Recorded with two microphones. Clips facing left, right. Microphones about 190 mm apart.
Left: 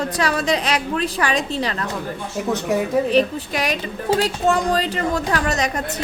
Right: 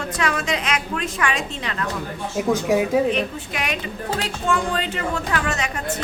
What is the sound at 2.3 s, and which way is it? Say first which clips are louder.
Speech: right 2 dB; 5° right (ahead or behind).